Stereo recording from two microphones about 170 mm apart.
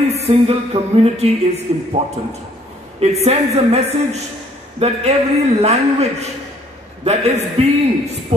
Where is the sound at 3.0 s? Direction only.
40° right (ahead or behind).